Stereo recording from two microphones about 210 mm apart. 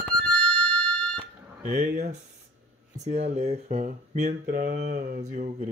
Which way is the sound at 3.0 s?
30° right (ahead or behind).